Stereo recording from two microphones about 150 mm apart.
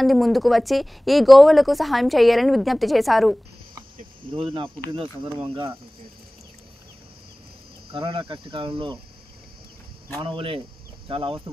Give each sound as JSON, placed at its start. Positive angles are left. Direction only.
{"t": 0.0, "sound": "speech", "side_deg": 0}
{"t": 4.3, "sound": "cricket", "side_deg": -35}
{"t": 7.9, "sound": "cricket", "side_deg": -35}
{"t": 10.1, "sound": "cricket", "side_deg": -35}